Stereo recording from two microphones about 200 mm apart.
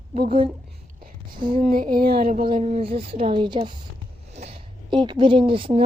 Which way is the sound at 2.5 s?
30° right (ahead or behind).